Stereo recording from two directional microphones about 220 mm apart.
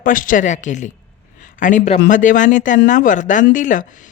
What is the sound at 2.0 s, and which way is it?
A woman's voice, 35° left (ahead or behind).